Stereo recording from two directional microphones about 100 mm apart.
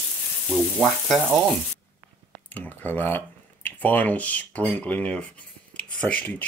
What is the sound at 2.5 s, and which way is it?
Speech, 20° left (ahead or behind).